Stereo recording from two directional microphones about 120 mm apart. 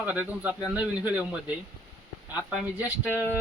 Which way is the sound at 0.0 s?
10° right (ahead or behind).